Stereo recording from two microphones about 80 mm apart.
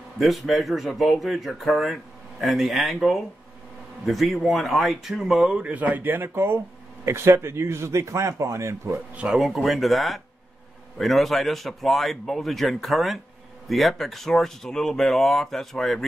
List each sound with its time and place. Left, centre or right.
0.2 s speech: centre
5.6 s speech: centre; by 9.0 s right
9.1 s speech: centre
9.4 s speech: centre